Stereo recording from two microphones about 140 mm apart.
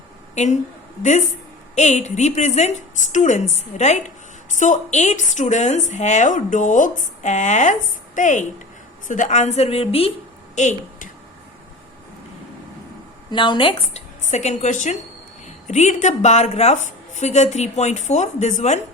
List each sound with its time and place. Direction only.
0.3 s a woman's voice: 60° left (ahead or behind)
1.7 s a woman's voice: 55° left (ahead or behind)
10.5 s a woman's voice: 60° left (ahead or behind)
13.3 s a woman's voice: 35° left (ahead or behind)
14.3 s a woman's voice: 55° left (ahead or behind)